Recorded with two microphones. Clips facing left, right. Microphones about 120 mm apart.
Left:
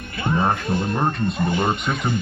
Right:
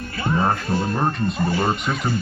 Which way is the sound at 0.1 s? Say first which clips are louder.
Even; 20° left (ahead or behind).